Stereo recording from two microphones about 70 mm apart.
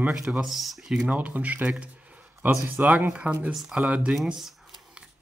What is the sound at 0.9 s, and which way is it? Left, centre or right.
Speech, right.